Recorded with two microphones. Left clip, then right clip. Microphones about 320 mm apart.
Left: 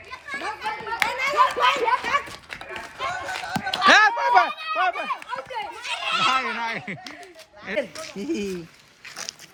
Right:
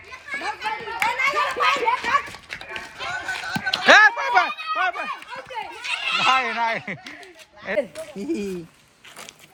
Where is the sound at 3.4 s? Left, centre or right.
Left.